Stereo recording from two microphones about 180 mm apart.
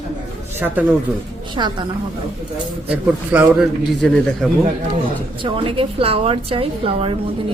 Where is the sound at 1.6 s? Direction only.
25° right (ahead or behind).